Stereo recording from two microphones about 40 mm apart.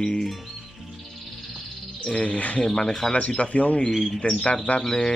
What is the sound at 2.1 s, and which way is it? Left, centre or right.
Speech, left.